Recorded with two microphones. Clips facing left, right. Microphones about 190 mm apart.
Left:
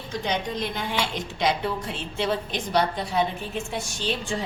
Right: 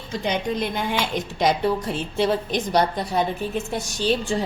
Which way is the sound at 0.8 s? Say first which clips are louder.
Right 4 dB; 50° right (ahead or behind).